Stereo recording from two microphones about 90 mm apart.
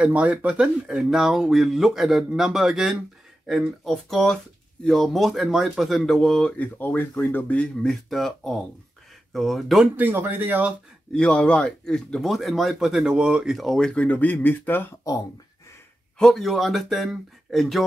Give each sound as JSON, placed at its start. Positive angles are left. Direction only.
{"t": 0.0, "sound": "speech", "side_deg": -15}
{"t": 6.6, "sound": "speech", "side_deg": 20}
{"t": 9.9, "sound": "speech", "side_deg": -20}
{"t": 11.1, "sound": "speech", "side_deg": 5}
{"t": 16.2, "sound": "speech", "side_deg": 5}